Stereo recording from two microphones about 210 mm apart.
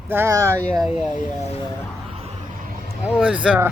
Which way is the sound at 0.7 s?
Centre (ahead or behind).